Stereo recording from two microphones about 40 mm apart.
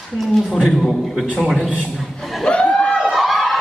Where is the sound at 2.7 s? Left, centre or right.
Left.